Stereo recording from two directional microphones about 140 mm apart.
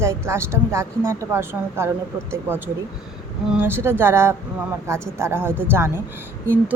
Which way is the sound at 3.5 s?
15° right (ahead or behind).